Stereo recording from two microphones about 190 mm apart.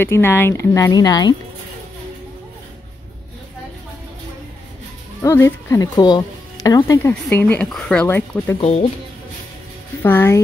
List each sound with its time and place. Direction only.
0.0 s speech: 10° left (ahead or behind)
5.2 s speech: 15° left (ahead or behind)
8.5 s speech: 35° left (ahead or behind)
10.0 s speech: 10° left (ahead or behind)